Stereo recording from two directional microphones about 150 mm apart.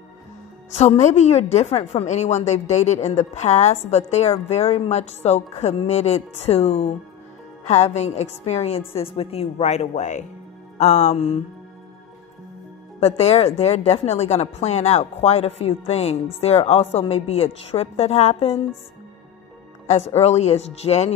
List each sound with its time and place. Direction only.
0.7 s a woman's voice: 50° left (ahead or behind)
13.0 s a woman's voice: 45° left (ahead or behind)
19.9 s a woman's voice: 45° left (ahead or behind)